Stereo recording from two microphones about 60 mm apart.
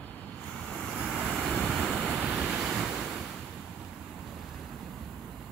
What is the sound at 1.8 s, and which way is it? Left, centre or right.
Waves, right.